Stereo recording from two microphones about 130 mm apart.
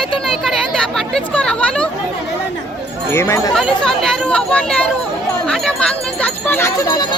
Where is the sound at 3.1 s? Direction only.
20° left (ahead or behind).